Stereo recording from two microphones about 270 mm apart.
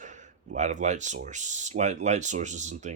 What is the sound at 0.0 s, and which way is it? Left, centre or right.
Speech, right.